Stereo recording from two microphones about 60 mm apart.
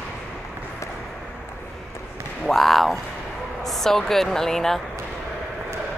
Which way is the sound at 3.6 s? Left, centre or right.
Centre.